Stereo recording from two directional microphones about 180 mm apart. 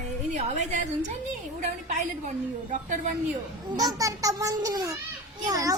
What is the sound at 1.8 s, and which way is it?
A woman's voice, 45° right (ahead or behind).